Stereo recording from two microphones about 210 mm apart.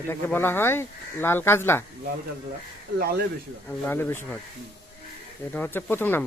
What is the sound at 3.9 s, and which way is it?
Speech, 10° left (ahead or behind).